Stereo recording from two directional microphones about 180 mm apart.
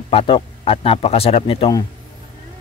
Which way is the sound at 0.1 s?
30° left (ahead or behind).